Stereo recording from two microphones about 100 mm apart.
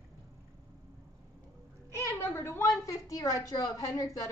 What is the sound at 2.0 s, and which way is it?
Speech, 25° left (ahead or behind).